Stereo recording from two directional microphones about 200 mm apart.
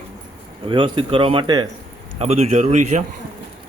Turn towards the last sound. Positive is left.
turn(degrees=-35)  # may be behind; listen again after turning